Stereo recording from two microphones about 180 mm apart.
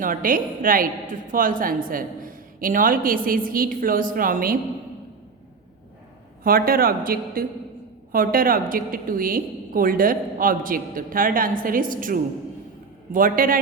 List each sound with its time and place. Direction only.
0.0 s a woman's voice: 50° right (ahead or behind)
6.4 s a woman's voice: 55° right (ahead or behind)